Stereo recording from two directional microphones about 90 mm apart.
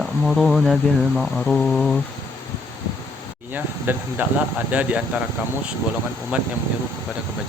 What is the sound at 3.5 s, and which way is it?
Speech, 20° right (ahead or behind).